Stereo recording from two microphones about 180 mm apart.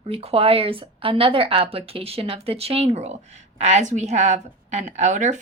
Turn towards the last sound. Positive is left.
turn(degrees=-40)  # may be behind; listen again after turning